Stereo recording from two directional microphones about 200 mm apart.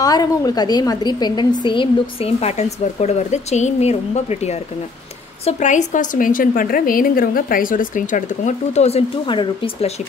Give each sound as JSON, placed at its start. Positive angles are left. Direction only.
{"t": 0.0, "sound": "a woman's voice", "side_deg": 20}